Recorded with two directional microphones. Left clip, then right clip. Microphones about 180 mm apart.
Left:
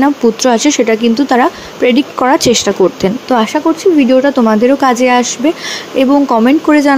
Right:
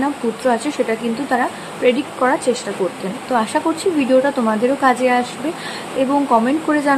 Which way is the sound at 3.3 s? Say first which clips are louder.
Left 5 dB; 30° left (ahead or behind).